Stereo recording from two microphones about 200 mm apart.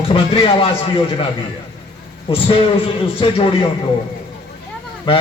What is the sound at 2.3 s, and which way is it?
A man's voice, 25° left (ahead or behind).